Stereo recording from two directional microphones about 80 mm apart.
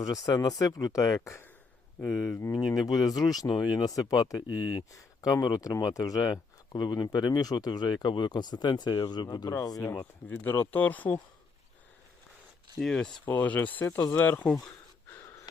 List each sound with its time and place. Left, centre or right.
0.0 s speech: left
2.6 s speech: centre
2.8 s speech: left
10.2 s speech: left
12.8 s speech: centre
13.2 s speech: left